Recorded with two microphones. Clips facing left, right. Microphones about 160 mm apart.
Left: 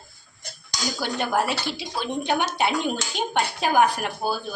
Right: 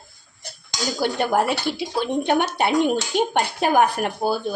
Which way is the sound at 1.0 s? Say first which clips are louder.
Right 4 dB; 55° right (ahead or behind).